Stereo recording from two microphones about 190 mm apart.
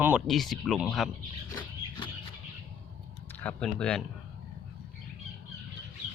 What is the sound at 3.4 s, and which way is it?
Speech, 5° left (ahead or behind).